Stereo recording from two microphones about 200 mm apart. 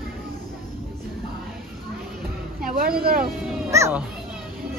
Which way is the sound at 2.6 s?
45° right (ahead or behind).